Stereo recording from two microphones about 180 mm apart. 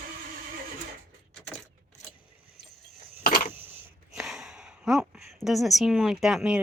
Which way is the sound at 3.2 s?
55° left (ahead or behind).